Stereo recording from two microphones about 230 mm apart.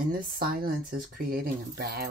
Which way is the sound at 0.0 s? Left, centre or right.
Right.